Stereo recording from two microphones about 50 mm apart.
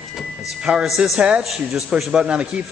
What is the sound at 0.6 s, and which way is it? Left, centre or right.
Speech, centre.